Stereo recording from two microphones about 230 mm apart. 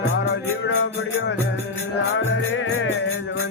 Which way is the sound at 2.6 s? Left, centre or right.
Left.